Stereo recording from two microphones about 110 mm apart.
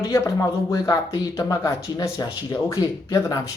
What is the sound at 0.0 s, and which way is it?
Speech, 30° left (ahead or behind).